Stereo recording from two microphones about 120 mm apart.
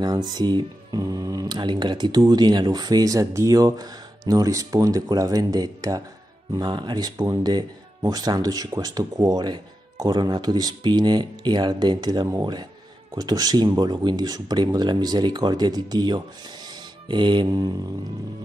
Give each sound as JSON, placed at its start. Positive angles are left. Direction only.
{"t": 0.0, "sound": "speech", "side_deg": -35}